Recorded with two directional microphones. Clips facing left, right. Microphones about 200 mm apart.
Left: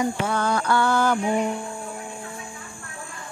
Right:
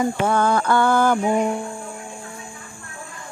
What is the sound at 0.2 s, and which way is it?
Mantra, 50° right (ahead or behind).